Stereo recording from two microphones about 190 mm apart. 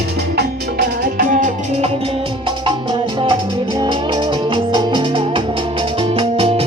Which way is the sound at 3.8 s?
25° right (ahead or behind).